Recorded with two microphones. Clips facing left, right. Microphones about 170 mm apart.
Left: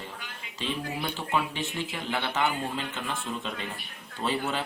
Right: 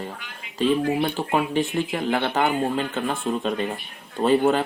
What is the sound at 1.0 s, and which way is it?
Speech, 50° right (ahead or behind).